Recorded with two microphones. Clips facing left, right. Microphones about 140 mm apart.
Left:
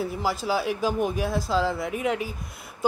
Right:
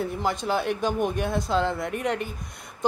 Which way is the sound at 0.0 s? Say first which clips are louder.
Even; 5° left (ahead or behind).